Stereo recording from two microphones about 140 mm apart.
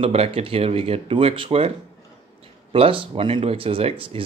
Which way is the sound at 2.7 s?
40° right (ahead or behind).